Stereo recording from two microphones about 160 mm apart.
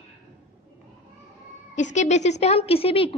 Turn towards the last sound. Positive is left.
turn(degrees=35)  # may be behind; listen again after turning